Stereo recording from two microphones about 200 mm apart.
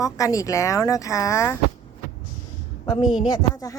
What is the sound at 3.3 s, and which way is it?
Speech, 20° left (ahead or behind).